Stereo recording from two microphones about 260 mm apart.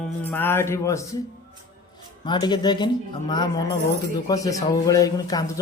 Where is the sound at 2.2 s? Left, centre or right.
Centre.